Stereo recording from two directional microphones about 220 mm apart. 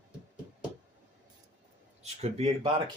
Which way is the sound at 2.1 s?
30° right (ahead or behind).